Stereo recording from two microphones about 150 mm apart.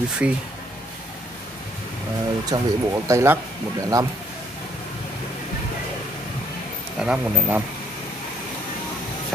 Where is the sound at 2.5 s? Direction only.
20° right (ahead or behind).